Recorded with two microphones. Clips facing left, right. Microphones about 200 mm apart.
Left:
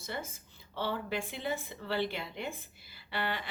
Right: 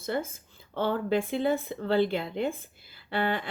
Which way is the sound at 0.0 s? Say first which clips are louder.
Right 9 dB; 55° right (ahead or behind).